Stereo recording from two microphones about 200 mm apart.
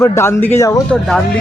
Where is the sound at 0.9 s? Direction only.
Centre (ahead or behind).